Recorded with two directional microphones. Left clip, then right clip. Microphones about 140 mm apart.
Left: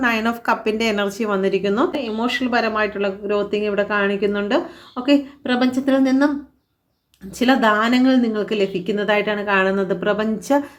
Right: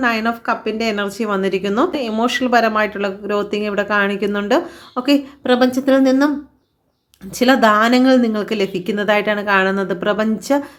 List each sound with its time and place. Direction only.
0.0 s speech: 10° right (ahead or behind); by 6.3 s 25° right (ahead or behind)
7.3 s speech: 20° right (ahead or behind)